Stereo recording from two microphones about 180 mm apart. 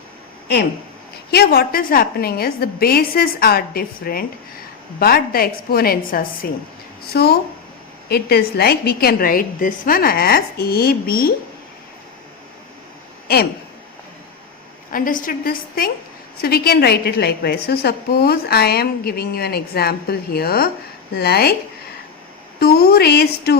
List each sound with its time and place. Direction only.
0.4 s a woman's voice: 70° left (ahead or behind)
13.2 s speech: 60° left (ahead or behind)
14.9 s a woman's voice: 50° left (ahead or behind)
22.6 s a woman's voice: 55° left (ahead or behind)